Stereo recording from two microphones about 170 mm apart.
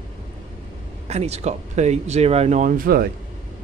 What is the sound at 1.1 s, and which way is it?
Speech, 40° right (ahead or behind).